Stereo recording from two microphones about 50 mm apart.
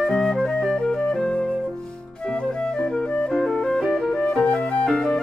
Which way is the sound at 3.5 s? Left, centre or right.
Centre.